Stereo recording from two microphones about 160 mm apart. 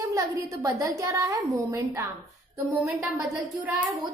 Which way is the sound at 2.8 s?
Centre (ahead or behind).